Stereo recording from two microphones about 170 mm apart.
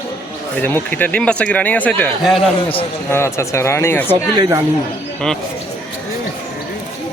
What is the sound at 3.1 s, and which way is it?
Speech, 15° left (ahead or behind).